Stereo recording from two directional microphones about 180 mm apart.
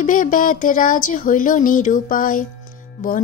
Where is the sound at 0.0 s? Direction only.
50° left (ahead or behind).